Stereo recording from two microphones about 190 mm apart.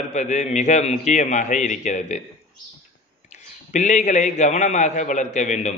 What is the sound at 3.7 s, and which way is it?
A man's voice, 40° left (ahead or behind).